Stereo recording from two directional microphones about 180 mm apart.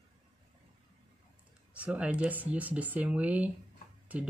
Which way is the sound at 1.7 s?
5° right (ahead or behind).